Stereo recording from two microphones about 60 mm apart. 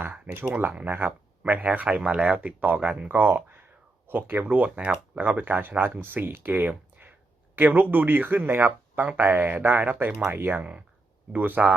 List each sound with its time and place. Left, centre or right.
0.0 s speech: right
3.1 s speech: right